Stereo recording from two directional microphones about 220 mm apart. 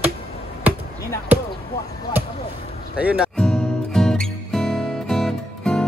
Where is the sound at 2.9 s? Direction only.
5° right (ahead or behind).